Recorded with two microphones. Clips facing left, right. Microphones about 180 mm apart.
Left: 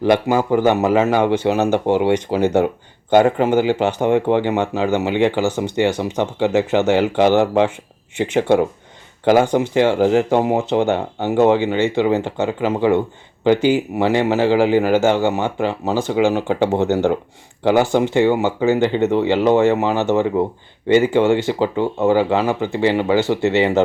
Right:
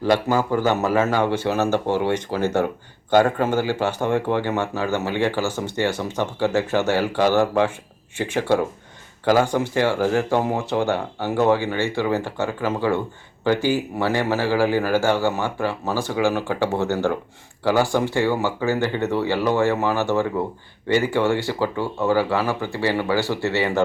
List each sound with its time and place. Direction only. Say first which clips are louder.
0.0 s a man's voice: left 4 dB; 20° left (ahead or behind)